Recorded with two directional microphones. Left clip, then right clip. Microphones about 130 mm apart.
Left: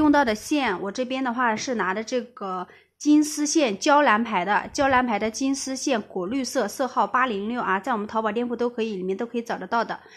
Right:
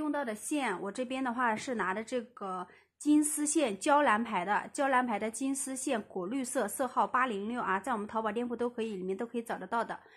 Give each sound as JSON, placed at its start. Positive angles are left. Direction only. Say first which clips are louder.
{"t": 0.1, "sound": "a woman's voice", "louder": "left 15 dB", "side_deg": 85}
{"t": 0.5, "sound": "a woman's voice", "louder": "left 9 dB", "side_deg": 30}